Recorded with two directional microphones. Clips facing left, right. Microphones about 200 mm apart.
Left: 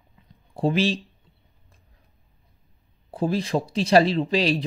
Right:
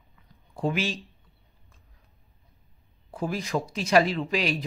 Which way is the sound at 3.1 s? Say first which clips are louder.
Left 5 dB; 30° left (ahead or behind).